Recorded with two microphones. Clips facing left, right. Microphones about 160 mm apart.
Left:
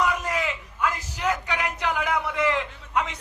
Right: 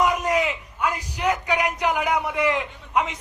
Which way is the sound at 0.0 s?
20° right (ahead or behind).